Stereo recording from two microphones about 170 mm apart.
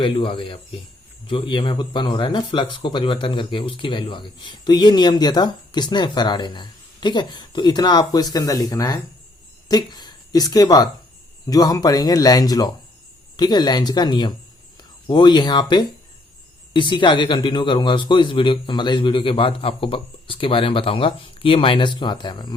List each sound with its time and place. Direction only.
0.0 s speech: 30° left (ahead or behind)
16.7 s speech: 30° left (ahead or behind)